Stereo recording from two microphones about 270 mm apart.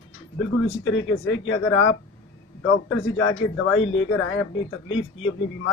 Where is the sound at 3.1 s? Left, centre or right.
Left.